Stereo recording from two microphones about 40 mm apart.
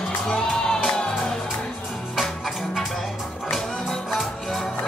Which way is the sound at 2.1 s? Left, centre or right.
Centre.